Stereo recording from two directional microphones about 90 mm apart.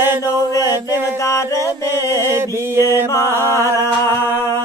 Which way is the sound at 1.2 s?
35° left (ahead or behind).